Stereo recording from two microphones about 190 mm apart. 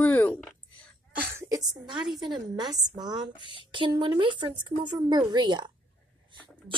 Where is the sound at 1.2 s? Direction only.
15° right (ahead or behind).